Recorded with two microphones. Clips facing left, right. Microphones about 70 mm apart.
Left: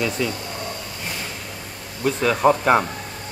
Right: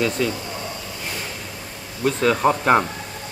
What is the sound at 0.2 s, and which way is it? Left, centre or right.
Speech, centre.